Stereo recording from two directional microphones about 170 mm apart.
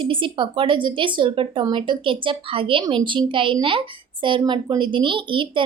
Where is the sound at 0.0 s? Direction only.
30° right (ahead or behind).